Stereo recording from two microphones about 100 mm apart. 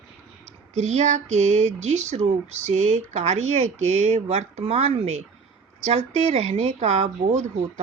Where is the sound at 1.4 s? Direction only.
90° right.